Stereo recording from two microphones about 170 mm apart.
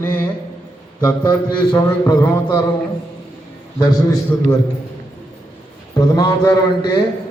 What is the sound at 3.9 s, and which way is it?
Speech, 20° left (ahead or behind).